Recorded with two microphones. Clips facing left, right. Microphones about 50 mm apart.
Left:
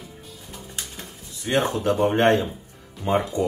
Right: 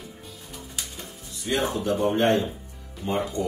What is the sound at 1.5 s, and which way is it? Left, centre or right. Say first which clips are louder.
Speech: left 4 dB; left.